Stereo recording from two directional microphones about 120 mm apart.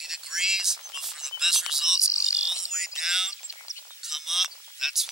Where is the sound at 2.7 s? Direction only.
5° right (ahead or behind).